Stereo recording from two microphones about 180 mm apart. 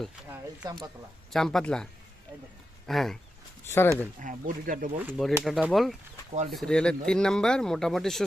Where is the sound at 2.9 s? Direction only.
Centre (ahead or behind).